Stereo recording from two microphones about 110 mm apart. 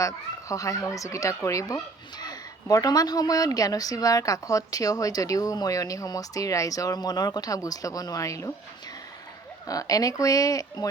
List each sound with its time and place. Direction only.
0.0 s speech: 30° left (ahead or behind)
9.6 s speech: 30° left (ahead or behind)